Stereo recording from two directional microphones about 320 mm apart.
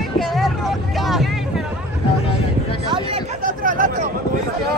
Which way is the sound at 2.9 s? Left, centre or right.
Right.